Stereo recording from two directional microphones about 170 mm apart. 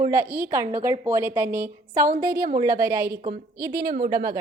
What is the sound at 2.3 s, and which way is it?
Speech, 50° right (ahead or behind).